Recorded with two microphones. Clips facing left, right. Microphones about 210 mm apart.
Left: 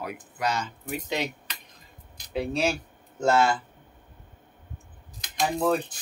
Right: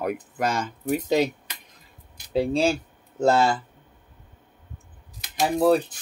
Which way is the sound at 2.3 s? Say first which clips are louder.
Right 5 dB; 30° right (ahead or behind).